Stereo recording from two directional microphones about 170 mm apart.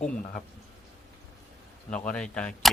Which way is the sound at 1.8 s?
5° left (ahead or behind).